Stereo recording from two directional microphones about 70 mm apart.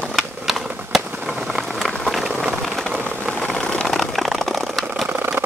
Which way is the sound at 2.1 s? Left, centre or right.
Centre.